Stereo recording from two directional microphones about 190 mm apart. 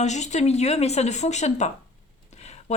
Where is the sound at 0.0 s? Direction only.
40° left (ahead or behind).